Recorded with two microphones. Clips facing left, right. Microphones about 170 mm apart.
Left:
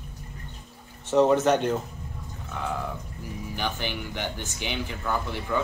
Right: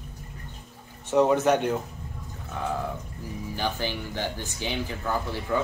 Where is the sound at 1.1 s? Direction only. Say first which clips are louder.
Left 1 dB; 10° right (ahead or behind).